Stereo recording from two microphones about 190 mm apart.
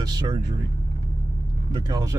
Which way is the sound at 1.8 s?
20° right (ahead or behind).